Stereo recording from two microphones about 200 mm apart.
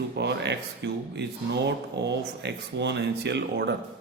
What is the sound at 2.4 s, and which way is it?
A man's voice, 60° right (ahead or behind).